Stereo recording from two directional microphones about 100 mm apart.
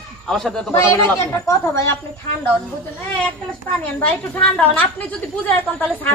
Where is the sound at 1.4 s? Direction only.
30° left (ahead or behind).